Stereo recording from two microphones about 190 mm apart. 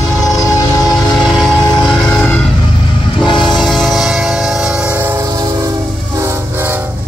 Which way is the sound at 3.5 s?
Centre (ahead or behind).